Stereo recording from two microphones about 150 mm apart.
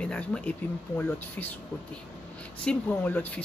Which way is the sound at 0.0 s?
5° left (ahead or behind).